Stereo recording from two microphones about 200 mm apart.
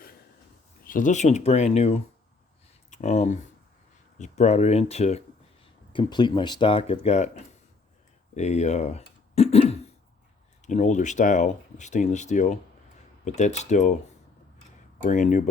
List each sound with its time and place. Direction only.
0.9 s speech: 40° left (ahead or behind)
8.4 s a sound: 35° left (ahead or behind)
10.7 s speech: 35° left (ahead or behind)
15.0 s speech: 40° left (ahead or behind)